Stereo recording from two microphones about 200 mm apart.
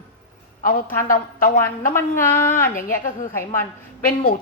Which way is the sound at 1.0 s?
45° left (ahead or behind).